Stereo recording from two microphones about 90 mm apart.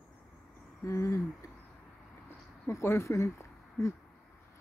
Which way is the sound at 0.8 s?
35° left (ahead or behind).